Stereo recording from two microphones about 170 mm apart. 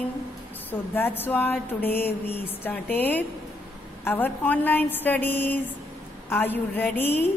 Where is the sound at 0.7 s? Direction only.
10° left (ahead or behind).